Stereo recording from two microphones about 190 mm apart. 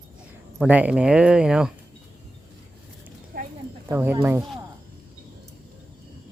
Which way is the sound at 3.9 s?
10° right (ahead or behind).